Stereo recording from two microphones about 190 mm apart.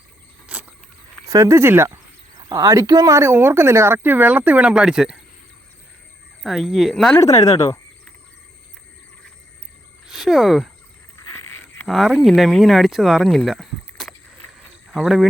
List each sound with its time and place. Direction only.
0.5 s a sound: 5° right (ahead or behind)
1.2 s speech: 15° right (ahead or behind)
6.4 s speech: centre (ahead or behind)
7.2 s speech: 15° left (ahead or behind)
10.1 s speech: centre (ahead or behind)
11.2 s a sound: 15° left (ahead or behind)
11.9 s speech: centre (ahead or behind)